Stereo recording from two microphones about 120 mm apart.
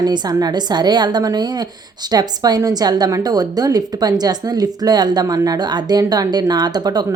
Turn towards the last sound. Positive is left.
turn(degrees=-35)  # may be behind; listen again after turning